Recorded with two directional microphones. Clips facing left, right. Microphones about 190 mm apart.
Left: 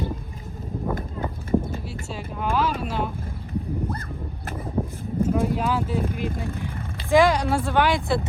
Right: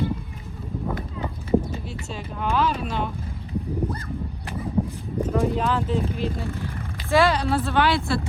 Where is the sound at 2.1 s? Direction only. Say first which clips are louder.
Even; 10° left (ahead or behind).